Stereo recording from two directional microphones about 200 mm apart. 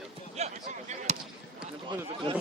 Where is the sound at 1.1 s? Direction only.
35° right (ahead or behind).